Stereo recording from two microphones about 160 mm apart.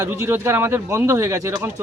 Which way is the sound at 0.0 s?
15° right (ahead or behind).